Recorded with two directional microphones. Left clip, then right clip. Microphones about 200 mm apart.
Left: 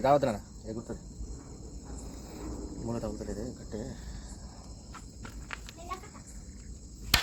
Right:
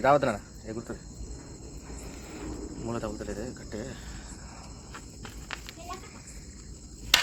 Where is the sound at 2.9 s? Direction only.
25° left (ahead or behind).